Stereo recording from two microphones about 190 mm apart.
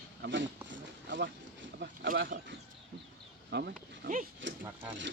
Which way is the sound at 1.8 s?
55° right (ahead or behind).